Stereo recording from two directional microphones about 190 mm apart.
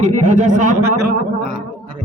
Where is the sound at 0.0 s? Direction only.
40° right (ahead or behind).